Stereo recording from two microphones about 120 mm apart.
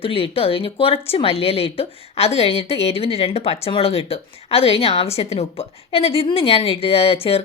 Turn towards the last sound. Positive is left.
turn(degrees=55)  # may be behind; listen again after turning